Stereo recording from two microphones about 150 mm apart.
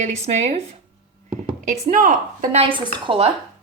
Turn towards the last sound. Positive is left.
turn(degrees=-35)  # may be behind; listen again after turning